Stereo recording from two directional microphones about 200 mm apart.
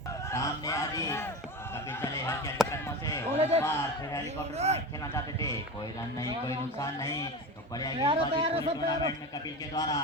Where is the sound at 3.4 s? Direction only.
30° right (ahead or behind).